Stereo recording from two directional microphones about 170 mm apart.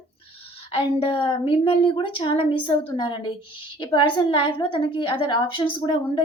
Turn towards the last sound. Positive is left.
turn(degrees=30)  # may be behind; listen again after turning